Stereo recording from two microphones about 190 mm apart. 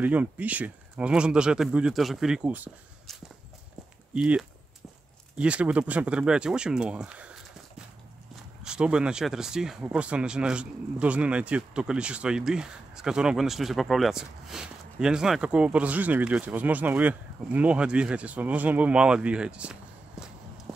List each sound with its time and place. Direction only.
0.0 s speech: 10° right (ahead or behind)
4.1 s speech: 5° right (ahead or behind)
8.6 s speech: 5° right (ahead or behind)